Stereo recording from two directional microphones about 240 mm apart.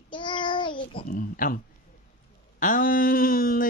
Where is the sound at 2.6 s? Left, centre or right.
Left.